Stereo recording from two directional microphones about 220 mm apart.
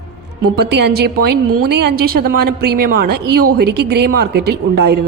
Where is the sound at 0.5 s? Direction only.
50° right (ahead or behind).